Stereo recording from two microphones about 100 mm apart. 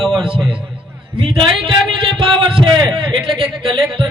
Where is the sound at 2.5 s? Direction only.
50° right (ahead or behind).